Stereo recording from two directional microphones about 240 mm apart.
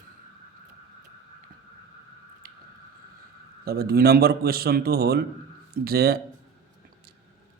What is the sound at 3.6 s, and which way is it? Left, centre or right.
Speech, right.